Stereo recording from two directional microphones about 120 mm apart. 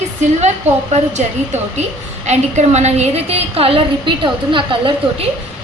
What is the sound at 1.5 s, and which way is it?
A woman's voice, 70° right (ahead or behind).